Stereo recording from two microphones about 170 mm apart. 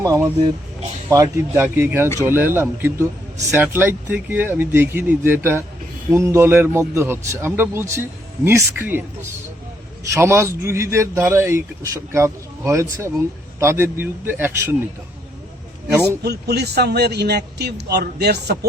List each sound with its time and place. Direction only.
0.0 s a man's voice: 20° right (ahead or behind)
16.2 s speech: 75° right (ahead or behind)